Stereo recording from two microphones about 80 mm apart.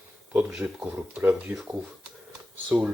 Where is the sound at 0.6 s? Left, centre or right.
Right.